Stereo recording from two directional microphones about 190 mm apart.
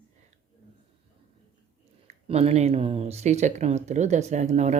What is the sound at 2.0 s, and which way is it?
Speech, 30° right (ahead or behind).